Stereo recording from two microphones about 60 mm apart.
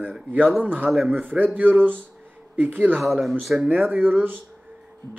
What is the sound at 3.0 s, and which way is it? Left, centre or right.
Speech, centre.